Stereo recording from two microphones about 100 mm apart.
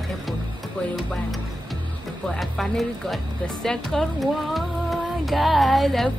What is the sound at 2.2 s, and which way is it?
Speech, 5° left (ahead or behind).